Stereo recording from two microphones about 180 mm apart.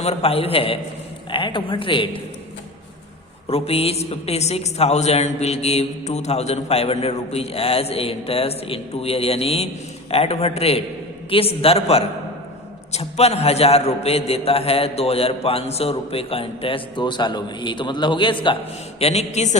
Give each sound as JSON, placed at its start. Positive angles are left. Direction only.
{"t": 0.0, "sound": "a woman's voice", "side_deg": 35}
{"t": 3.5, "sound": "a woman's voice", "side_deg": 35}